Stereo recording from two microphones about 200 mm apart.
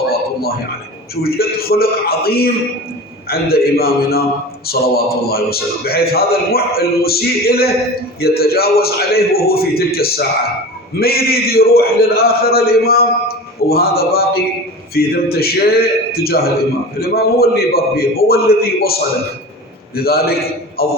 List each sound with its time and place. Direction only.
1.1 s a man's voice: 50° left (ahead or behind)
20.0 s a man's voice: 50° left (ahead or behind)